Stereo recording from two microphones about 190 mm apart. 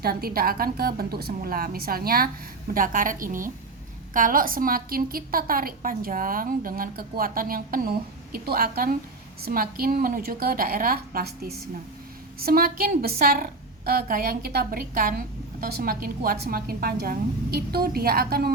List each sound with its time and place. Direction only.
0.0 s a woman's voice: 50° right (ahead or behind)